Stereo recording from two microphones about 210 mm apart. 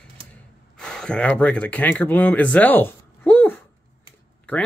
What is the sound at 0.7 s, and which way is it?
Speech, 5° left (ahead or behind).